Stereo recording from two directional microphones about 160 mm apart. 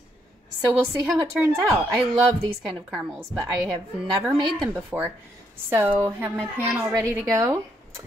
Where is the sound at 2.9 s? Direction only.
Centre (ahead or behind).